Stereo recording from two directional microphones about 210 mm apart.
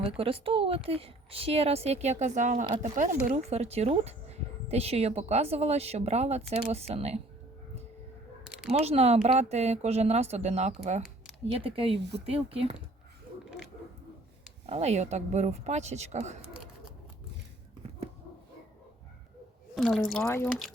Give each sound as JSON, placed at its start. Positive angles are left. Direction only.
{"t": 0.0, "sound": "speech", "side_deg": -25}
{"t": 8.4, "sound": "a sound", "side_deg": -5}
{"t": 8.8, "sound": "speech", "side_deg": -30}
{"t": 14.7, "sound": "speech", "side_deg": -30}
{"t": 19.7, "sound": "speech", "side_deg": 0}
{"t": 20.2, "sound": "speech", "side_deg": 10}